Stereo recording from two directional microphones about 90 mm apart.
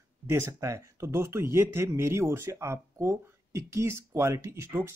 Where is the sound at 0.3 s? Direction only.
30° right (ahead or behind).